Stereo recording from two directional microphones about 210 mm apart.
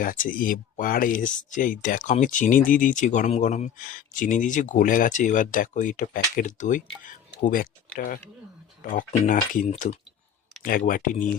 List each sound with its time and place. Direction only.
0.0 s speech: 40° left (ahead or behind)
8.8 s speech: 40° left (ahead or behind)